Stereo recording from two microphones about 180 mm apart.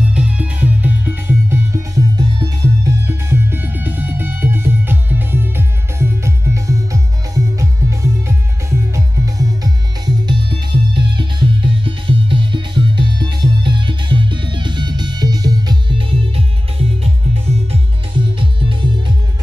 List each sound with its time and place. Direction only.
0.1 s music: 5° right (ahead or behind); by 16.4 s 30° right (ahead or behind)
17.6 s music: 30° right (ahead or behind)